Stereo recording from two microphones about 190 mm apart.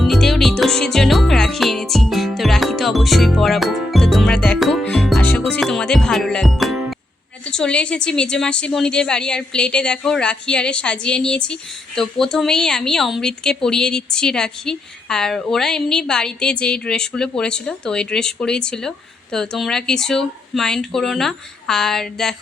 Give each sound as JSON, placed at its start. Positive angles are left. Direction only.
{"t": 0.0, "sound": "music", "side_deg": 0}
{"t": 7.5, "sound": "a woman's voice", "side_deg": 5}